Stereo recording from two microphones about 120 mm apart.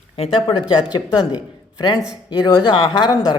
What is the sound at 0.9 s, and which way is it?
A woman's voice, 35° left (ahead or behind).